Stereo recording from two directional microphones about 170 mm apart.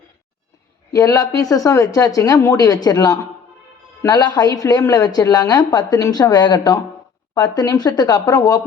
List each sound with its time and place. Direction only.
0.9 s a woman's voice: 20° left (ahead or behind)